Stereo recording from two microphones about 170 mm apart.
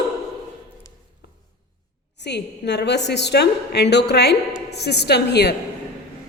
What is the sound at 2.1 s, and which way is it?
A woman's voice, 85° left.